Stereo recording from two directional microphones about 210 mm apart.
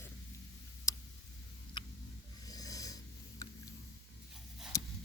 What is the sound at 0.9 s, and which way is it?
Tick, 15° left (ahead or behind).